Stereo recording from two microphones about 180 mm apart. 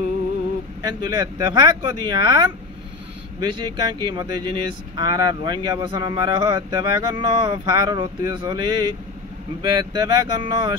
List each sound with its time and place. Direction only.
0.8 s speech: 20° right (ahead or behind)